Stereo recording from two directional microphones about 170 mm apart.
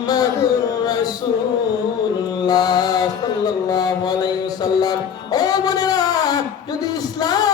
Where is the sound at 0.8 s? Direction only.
20° left (ahead or behind).